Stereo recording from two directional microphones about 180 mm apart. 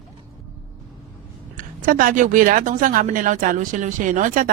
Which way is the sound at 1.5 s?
50° right (ahead or behind).